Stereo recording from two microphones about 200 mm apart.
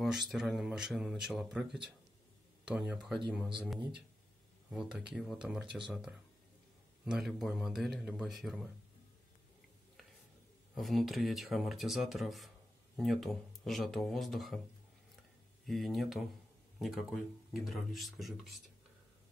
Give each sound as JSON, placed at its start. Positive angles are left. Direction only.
{"t": 0.0, "sound": "speech", "side_deg": 0}
{"t": 10.7, "sound": "speech", "side_deg": 0}
{"t": 15.6, "sound": "speech", "side_deg": 0}